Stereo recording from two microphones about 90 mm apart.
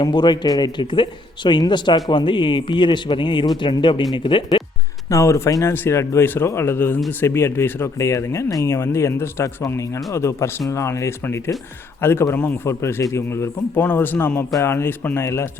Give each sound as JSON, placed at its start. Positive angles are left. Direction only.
{"t": 0.0, "sound": "speech", "side_deg": 55}
{"t": 0.8, "sound": "speech", "side_deg": 60}
{"t": 5.0, "sound": "a man's voice", "side_deg": 35}